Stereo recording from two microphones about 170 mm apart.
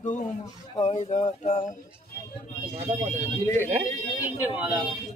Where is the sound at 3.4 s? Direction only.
15° left (ahead or behind).